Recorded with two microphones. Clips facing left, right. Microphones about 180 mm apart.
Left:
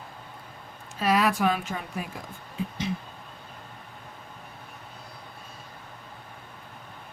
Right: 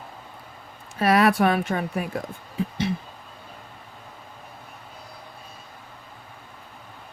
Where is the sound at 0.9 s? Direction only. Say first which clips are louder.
Right 5 dB; 60° right (ahead or behind).